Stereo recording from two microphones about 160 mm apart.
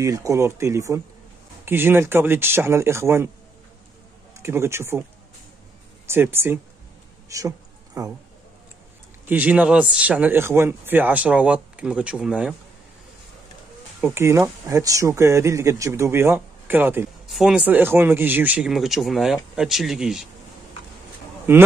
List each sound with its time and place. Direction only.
0.0 s speech: 20° right (ahead or behind)
4.4 s speech: 15° right (ahead or behind)
6.0 s speech: 15° right (ahead or behind)
7.2 s a sound: 20° right (ahead or behind)
9.2 s speech: 10° right (ahead or behind)
14.0 s speech: 15° right (ahead or behind)
21.5 s speech: 15° right (ahead or behind)